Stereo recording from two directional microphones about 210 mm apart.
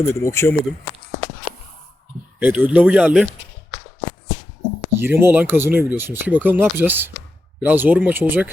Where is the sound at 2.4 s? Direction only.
10° right (ahead or behind).